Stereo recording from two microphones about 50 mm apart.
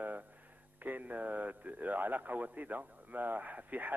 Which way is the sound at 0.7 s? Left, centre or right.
Right.